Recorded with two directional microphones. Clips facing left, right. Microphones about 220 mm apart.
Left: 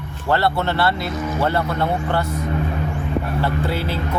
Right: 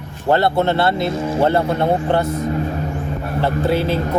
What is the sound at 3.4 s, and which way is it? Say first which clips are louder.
Speech: right 5 dB; 20° right (ahead or behind).